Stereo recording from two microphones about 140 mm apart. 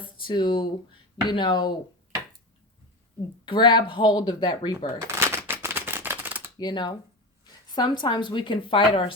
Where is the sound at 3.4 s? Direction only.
35° left (ahead or behind).